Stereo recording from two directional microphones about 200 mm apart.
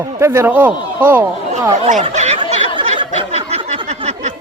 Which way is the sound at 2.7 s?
25° right (ahead or behind).